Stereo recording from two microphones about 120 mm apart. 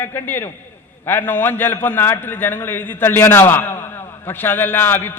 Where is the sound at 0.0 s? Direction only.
20° left (ahead or behind).